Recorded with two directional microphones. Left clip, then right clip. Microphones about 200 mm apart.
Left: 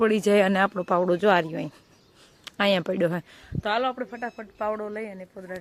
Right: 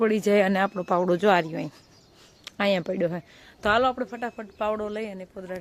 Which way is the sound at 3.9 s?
5° right (ahead or behind).